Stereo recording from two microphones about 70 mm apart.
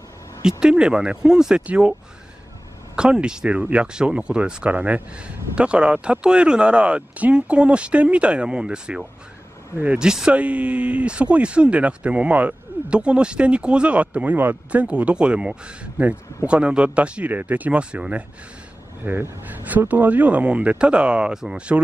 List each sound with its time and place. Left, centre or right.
0.4 s speech: centre
3.0 s speech: centre
19.0 s speech: right